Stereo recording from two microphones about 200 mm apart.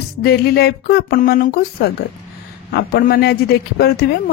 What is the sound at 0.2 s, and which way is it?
A man's voice, 55° left (ahead or behind).